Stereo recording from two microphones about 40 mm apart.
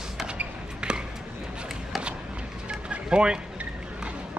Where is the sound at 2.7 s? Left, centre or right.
Right.